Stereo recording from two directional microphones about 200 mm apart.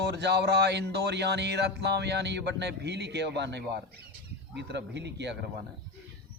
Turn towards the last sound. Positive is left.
turn(degrees=-60)  # may be behind; listen again after turning